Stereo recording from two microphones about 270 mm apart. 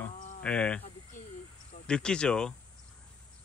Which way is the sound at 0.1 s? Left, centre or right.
Left.